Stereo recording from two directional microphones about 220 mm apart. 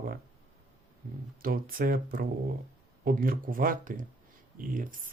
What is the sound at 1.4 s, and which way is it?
Speech, 40° right (ahead or behind).